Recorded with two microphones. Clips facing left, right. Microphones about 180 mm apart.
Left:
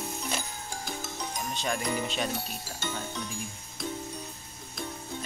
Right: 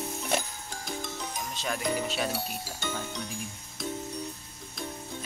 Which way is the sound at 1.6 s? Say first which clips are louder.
Right 1 dB; 5° right (ahead or behind).